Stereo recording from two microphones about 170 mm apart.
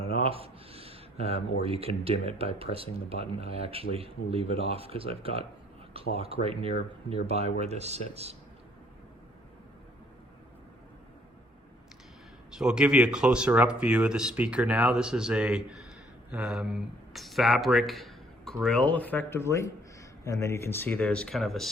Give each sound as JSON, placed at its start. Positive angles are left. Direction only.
{"t": 0.1, "sound": "a sound", "side_deg": -35}
{"t": 1.6, "sound": "speech", "side_deg": -35}
{"t": 12.5, "sound": "a man's voice", "side_deg": -5}